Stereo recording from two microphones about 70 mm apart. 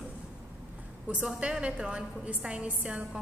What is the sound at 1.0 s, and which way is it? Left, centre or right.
A woman's voice, centre.